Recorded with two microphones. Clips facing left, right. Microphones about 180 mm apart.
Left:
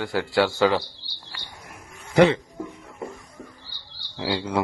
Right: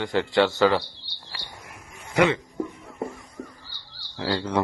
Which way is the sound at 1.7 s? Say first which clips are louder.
Left 5 dB; 35° left (ahead or behind).